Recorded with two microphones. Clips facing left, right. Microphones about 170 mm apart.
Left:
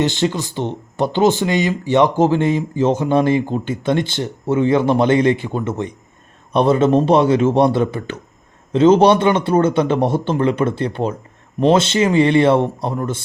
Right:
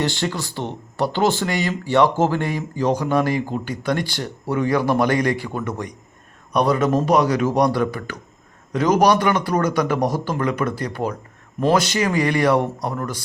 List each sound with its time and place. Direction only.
0.0 s speech: 20° left (ahead or behind)